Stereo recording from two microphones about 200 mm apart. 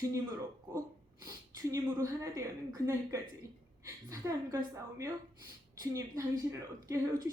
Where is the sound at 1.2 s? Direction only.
15° right (ahead or behind).